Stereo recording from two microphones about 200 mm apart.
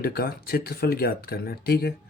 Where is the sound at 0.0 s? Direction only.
50° left (ahead or behind).